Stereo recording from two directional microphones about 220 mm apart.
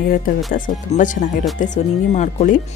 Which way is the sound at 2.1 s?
35° left (ahead or behind).